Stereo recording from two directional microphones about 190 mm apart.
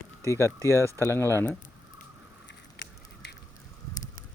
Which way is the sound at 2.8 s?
60° left (ahead or behind).